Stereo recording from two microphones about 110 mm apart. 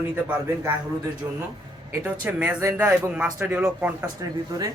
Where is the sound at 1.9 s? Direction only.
15° right (ahead or behind).